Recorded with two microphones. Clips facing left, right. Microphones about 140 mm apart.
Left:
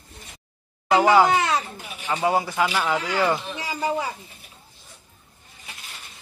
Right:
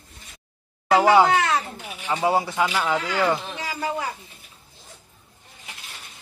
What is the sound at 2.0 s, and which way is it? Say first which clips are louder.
Speech: right 1 dB; 10° right (ahead or behind).